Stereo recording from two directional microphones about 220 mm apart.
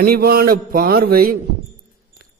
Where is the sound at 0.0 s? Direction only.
45° right (ahead or behind).